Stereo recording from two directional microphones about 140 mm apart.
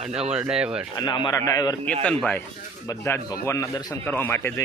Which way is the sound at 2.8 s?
20° left (ahead or behind).